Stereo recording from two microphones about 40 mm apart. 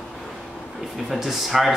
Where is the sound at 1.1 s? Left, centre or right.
Centre.